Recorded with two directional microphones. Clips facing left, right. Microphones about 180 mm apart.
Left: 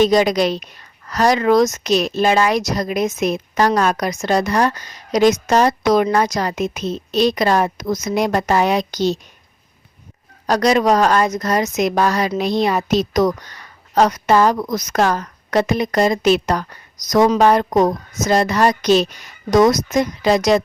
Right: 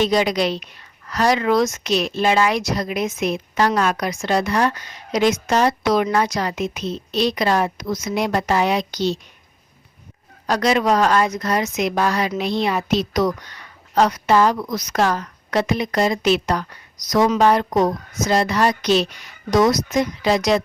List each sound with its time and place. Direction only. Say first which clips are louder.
0.0 s a woman's voice: left 4 dB; 45° left (ahead or behind)
10.4 s a woman's voice: left 3 dB; 40° left (ahead or behind)